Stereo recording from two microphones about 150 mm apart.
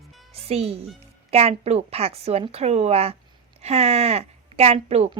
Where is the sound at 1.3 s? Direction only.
45° right (ahead or behind).